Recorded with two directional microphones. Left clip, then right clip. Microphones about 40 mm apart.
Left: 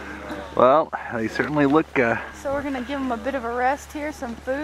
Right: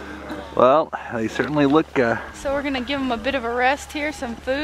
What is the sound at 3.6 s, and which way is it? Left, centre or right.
Speech, right.